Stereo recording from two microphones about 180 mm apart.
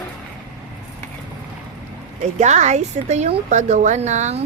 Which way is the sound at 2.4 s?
40° right (ahead or behind).